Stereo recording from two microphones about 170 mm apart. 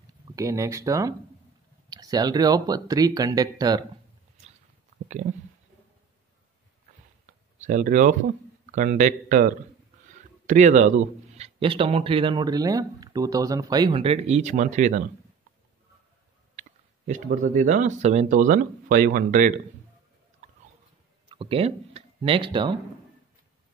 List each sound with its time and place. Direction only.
0.4 s speech: 20° right (ahead or behind)
7.5 s speech: 45° right (ahead or behind)
17.0 s speech: 50° right (ahead or behind)
21.3 s speech: 30° right (ahead or behind)